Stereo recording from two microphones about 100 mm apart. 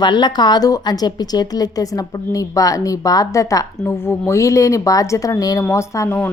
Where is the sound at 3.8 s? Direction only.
25° left (ahead or behind).